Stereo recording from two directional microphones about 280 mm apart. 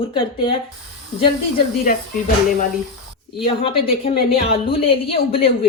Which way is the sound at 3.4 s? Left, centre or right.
Centre.